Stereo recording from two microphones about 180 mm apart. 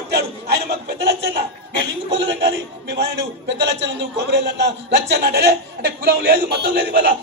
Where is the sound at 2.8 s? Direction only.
70° right (ahead or behind).